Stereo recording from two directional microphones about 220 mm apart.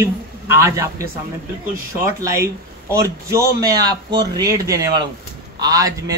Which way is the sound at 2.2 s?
15° right (ahead or behind).